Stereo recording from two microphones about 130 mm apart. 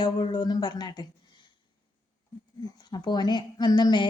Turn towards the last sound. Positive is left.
turn(degrees=35)  # may be behind; listen again after turning